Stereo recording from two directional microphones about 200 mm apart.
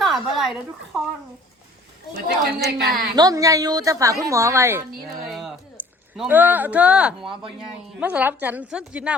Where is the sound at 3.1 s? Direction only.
20° right (ahead or behind).